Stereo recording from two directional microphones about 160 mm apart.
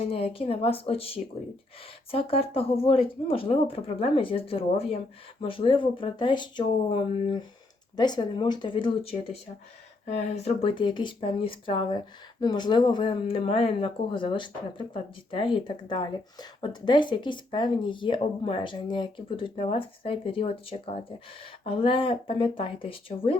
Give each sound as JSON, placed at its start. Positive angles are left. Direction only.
{"t": 0.0, "sound": "speech", "side_deg": 35}
{"t": 10.1, "sound": "speech", "side_deg": 45}